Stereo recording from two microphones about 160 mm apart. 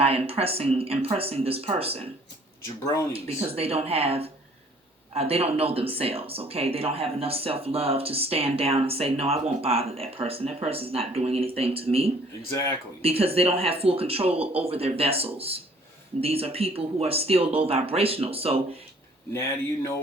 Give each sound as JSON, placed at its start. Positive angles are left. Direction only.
{"t": 0.0, "sound": "speech", "side_deg": -35}
{"t": 3.1, "sound": "speech", "side_deg": -35}